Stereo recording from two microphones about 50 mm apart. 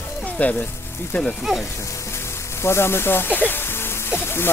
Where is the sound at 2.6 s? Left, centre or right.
Left.